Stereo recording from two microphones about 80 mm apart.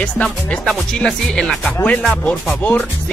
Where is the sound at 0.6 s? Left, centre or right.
Centre.